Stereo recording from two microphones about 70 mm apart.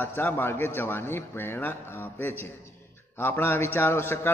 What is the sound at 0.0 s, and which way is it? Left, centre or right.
A man's voice, left.